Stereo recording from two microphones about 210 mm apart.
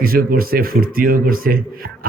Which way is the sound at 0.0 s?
45° right (ahead or behind).